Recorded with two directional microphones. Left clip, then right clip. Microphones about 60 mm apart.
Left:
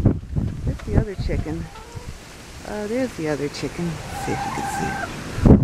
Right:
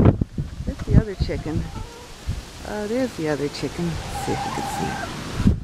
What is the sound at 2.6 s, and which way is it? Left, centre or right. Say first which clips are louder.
Speech: even; centre.